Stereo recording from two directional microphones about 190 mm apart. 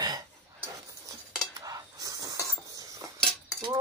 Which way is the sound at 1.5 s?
20° right (ahead or behind).